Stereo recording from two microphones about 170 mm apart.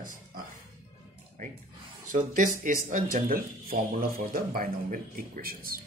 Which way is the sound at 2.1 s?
50° right (ahead or behind).